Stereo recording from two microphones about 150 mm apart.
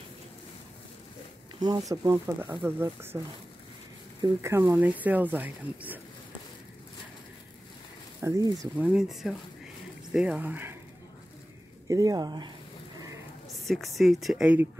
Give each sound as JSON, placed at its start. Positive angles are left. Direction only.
{"t": 1.9, "sound": "speech", "side_deg": -20}
{"t": 4.2, "sound": "speech", "side_deg": -20}
{"t": 8.2, "sound": "speech", "side_deg": -20}
{"t": 8.7, "sound": "speech", "side_deg": -5}
{"t": 11.9, "sound": "speech", "side_deg": -25}
{"t": 13.7, "sound": "speech", "side_deg": 0}